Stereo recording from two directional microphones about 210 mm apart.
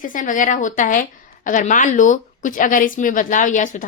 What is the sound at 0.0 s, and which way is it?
Speech, 40° left (ahead or behind).